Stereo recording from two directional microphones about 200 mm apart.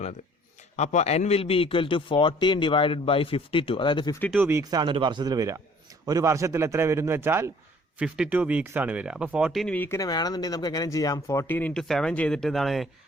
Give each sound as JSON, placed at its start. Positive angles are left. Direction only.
{"t": 0.8, "sound": "a man's voice", "side_deg": 35}
{"t": 4.3, "sound": "a man's voice", "side_deg": -10}